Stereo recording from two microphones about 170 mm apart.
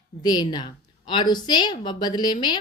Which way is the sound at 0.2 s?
25° left (ahead or behind).